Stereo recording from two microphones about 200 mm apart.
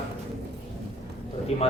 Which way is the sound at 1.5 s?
30° left (ahead or behind).